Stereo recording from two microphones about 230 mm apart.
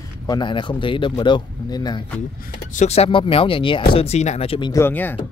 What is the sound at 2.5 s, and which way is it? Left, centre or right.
Speech, left.